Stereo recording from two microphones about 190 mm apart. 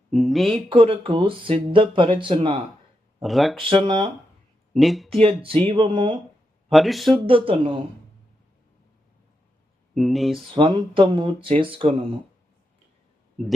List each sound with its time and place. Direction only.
0.1 s speech: centre (ahead or behind)
0.7 s speech: 30° right (ahead or behind)
3.2 s speech: centre (ahead or behind)
3.6 s speech: 30° right (ahead or behind)
4.7 s speech: centre (ahead or behind)
5.2 s speech: 30° right (ahead or behind)
6.7 s speech: centre (ahead or behind)
7.3 s speech: 30° right (ahead or behind)
9.9 s speech: centre (ahead or behind)
10.5 s speech: 25° right (ahead or behind)
13.4 s speech: centre (ahead or behind)